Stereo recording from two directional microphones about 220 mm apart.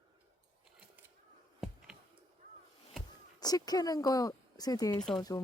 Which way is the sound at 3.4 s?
15° left (ahead or behind).